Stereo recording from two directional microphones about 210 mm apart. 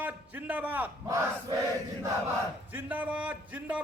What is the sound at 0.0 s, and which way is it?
Battle cry, 5° right (ahead or behind).